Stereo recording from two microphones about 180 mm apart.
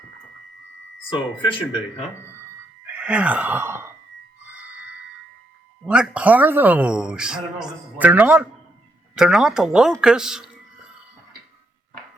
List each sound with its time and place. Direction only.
1.4 s speech: 30° left (ahead or behind)
2.8 s speech: 5° right (ahead or behind)
4.5 s a sound: 10° right (ahead or behind)
5.8 s a man's voice: 5° right (ahead or behind)